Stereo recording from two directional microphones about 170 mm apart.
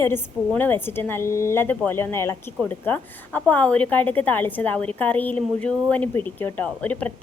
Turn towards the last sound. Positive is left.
turn(degrees=10)  # may be behind; listen again after turning